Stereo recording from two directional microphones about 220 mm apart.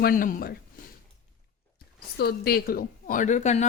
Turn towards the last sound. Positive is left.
turn(degrees=30)  # may be behind; listen again after turning